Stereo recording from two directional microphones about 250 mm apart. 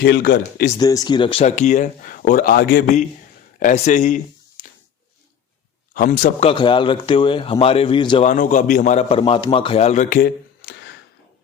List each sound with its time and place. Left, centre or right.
0.0 s a man's voice: left
0.8 s a man's voice: centre
4.6 s a sound: left
5.9 s a man's voice: left
8.3 s a man's voice: left